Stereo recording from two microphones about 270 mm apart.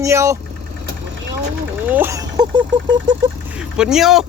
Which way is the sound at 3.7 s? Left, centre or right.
Centre.